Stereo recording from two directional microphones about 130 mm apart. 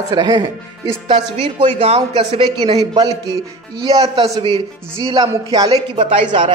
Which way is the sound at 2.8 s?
30° right (ahead or behind).